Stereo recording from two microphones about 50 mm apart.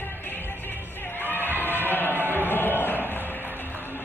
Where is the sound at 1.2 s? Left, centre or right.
Left.